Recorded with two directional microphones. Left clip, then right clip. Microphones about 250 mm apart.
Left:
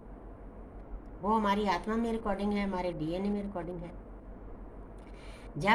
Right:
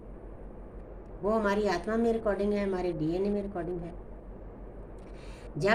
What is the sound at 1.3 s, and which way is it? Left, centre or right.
A woman's voice, left.